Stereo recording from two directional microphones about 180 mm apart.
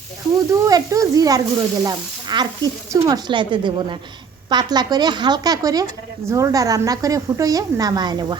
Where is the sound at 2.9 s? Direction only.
20° right (ahead or behind).